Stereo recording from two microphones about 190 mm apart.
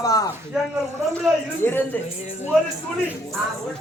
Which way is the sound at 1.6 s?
10° left (ahead or behind).